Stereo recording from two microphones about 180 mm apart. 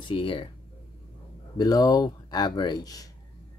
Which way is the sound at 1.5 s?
20° left (ahead or behind).